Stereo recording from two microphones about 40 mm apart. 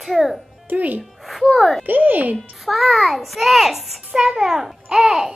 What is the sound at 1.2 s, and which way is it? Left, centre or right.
Speech, centre.